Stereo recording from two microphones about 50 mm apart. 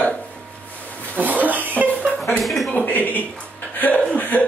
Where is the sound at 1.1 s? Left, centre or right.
Right.